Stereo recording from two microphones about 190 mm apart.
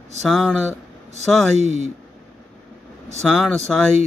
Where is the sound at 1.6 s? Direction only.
35° left (ahead or behind).